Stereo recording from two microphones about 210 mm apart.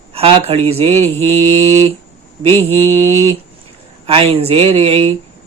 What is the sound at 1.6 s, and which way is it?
Speech, 30° right (ahead or behind).